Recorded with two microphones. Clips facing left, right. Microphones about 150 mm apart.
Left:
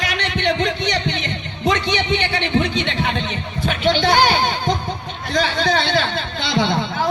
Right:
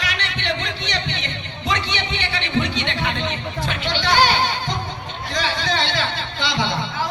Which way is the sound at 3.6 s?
50° left (ahead or behind).